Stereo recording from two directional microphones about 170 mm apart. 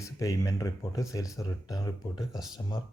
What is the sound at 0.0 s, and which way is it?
Speech, 20° left (ahead or behind).